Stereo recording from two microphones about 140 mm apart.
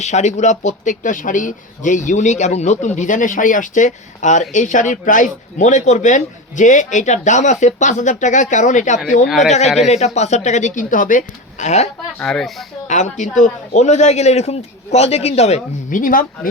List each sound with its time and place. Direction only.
0.0 s speech: 55° left (ahead or behind)
9.2 s speech: centre (ahead or behind)
9.7 s a man's voice: 50° left (ahead or behind); by 11.2 s 70° left (ahead or behind)
11.6 s a man's voice: 55° left (ahead or behind)
12.2 s speech: 5° left (ahead or behind)
12.9 s a man's voice: 60° left (ahead or behind)
15.9 s speech: 80° left